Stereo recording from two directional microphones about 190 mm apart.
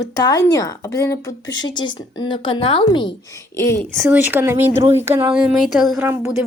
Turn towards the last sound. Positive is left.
turn(degrees=-15)  # may be behind; listen again after turning